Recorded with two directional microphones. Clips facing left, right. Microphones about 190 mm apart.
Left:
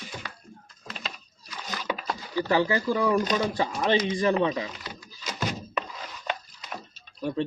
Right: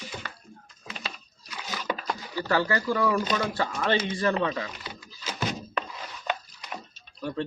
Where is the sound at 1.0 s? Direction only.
10° right (ahead or behind).